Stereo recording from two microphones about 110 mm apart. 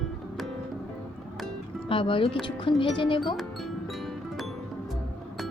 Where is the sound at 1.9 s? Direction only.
50° left (ahead or behind).